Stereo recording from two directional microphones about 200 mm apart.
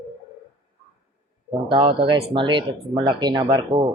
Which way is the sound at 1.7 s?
25° right (ahead or behind).